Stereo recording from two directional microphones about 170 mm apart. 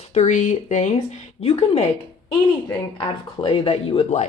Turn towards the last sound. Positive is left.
turn(degrees=40)  # may be behind; listen again after turning